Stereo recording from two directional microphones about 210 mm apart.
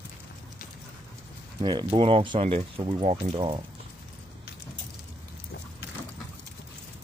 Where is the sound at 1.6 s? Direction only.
20° right (ahead or behind).